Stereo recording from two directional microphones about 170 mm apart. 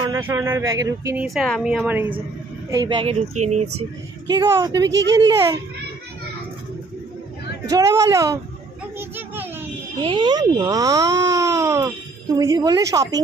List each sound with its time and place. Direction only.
0.0 s speech: 20° right (ahead or behind)
1.1 s a woman's voice: centre (ahead or behind)
2.7 s speech: 25° right (ahead or behind)
4.3 s speech: 25° right (ahead or behind)
7.6 s speech: 20° right (ahead or behind)
8.9 s children playing: 10° right (ahead or behind)
9.9 s speech: 30° right (ahead or behind)